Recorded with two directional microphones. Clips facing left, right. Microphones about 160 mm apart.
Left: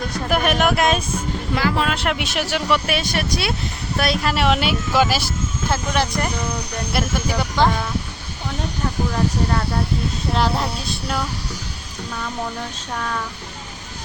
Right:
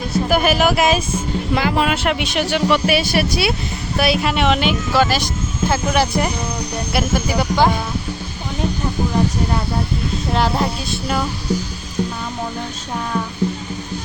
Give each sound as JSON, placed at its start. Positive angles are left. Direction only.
{"t": 0.1, "sound": "speech", "side_deg": -5}
{"t": 1.5, "sound": "speech", "side_deg": -15}
{"t": 2.0, "sound": "speech", "side_deg": 0}
{"t": 10.3, "sound": "speech", "side_deg": 0}